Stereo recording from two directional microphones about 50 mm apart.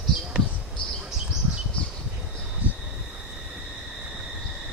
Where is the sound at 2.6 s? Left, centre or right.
Right.